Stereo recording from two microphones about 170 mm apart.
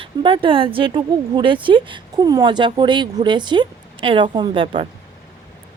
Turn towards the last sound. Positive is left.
turn(degrees=-30)  # may be behind; listen again after turning